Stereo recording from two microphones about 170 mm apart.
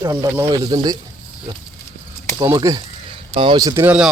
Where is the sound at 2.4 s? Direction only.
20° right (ahead or behind).